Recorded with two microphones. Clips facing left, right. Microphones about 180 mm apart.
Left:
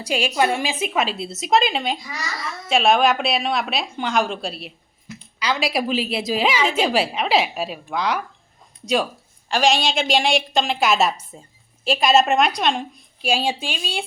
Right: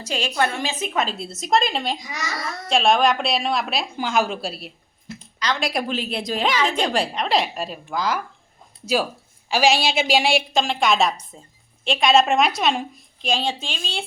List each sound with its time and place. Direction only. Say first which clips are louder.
0.0 s a woman's voice: left 3 dB; 10° left (ahead or behind)
2.0 s a child's voice: even; 20° right (ahead or behind)
2.6 s a woman's voice: left 1 dB; 5° left (ahead or behind)
13.2 s a woman's voice: left 2 dB; 10° left (ahead or behind)